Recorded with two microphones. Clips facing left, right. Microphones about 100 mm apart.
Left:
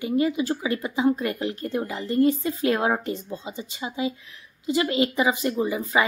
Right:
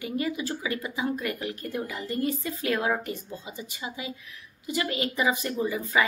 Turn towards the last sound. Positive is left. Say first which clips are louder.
# left 3 dB
turn(degrees=20)  # may be behind; listen again after turning